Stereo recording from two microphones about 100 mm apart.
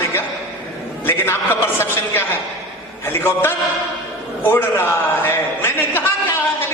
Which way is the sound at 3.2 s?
20° left (ahead or behind).